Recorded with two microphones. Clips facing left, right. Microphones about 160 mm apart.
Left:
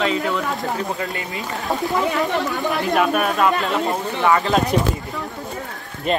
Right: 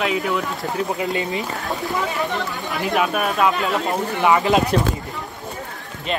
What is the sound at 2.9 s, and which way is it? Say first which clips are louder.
Speech: even; centre (ahead or behind).